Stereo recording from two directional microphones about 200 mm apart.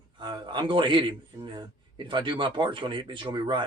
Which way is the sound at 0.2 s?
20° right (ahead or behind).